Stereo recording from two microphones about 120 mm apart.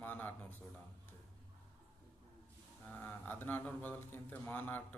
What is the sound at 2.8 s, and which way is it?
A man's voice, 15° left (ahead or behind).